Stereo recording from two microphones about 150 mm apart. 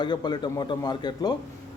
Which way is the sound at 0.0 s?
30° left (ahead or behind).